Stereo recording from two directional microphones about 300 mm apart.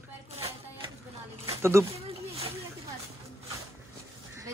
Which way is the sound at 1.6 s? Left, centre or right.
Centre.